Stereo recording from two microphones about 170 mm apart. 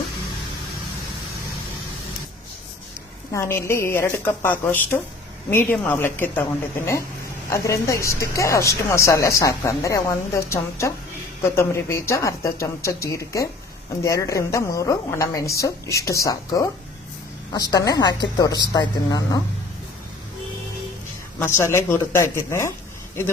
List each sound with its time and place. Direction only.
3.3 s a woman's voice: 15° left (ahead or behind)
21.3 s speech: 15° left (ahead or behind)